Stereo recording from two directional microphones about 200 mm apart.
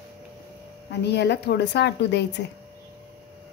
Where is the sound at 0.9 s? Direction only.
60° left (ahead or behind).